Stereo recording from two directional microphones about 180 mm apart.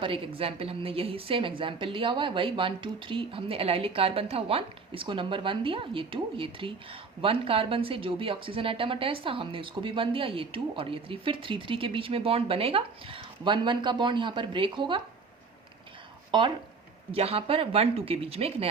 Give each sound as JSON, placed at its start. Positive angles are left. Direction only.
{"t": 0.0, "sound": "a woman's voice", "side_deg": -30}
{"t": 17.1, "sound": "speech", "side_deg": -35}